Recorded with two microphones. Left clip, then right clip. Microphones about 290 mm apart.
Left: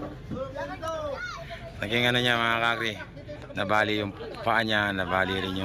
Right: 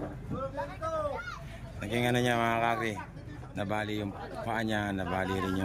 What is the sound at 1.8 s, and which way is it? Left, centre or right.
Speech, centre.